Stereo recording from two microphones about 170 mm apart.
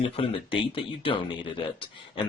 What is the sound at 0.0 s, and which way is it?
Speech, 35° left (ahead or behind).